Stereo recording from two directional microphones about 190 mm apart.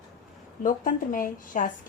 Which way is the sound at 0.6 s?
45° left (ahead or behind).